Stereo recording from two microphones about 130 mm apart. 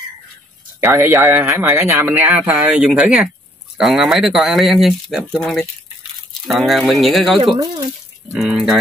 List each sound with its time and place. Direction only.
0.8 s speech: 20° right (ahead or behind); by 8.7 s centre (ahead or behind)